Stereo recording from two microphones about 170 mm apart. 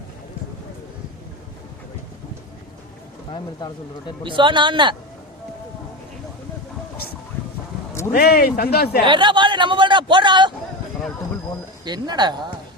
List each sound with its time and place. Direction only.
4.2 s speech: 30° right (ahead or behind)
8.1 s a man's voice: 65° left (ahead or behind)
9.0 s speech: 30° right (ahead or behind)
11.9 s speech: 25° right (ahead or behind)